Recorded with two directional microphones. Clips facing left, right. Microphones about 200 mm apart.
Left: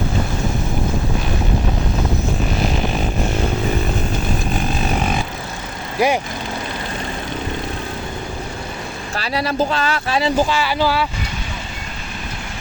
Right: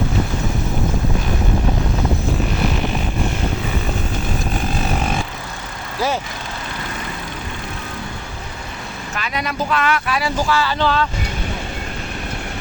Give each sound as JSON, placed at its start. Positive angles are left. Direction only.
{"t": 6.0, "sound": "speech", "side_deg": 15}
{"t": 9.1, "sound": "speech", "side_deg": 35}